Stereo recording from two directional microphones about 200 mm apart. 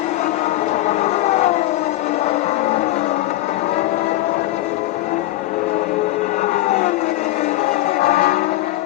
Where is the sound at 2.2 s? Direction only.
35° left (ahead or behind).